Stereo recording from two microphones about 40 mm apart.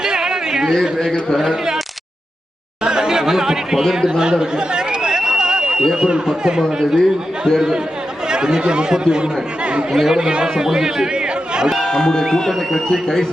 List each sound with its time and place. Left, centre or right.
0.0 s a sound: centre
0.7 s a man's voice: centre
1.4 s a man's voice: centre
2.8 s chatter: centre
4.2 s a sound: centre
5.8 s a man's voice: centre
8.3 s speech: centre
9.9 s a man's voice: centre
11.9 s a man's voice: centre
12.5 s a man's voice: centre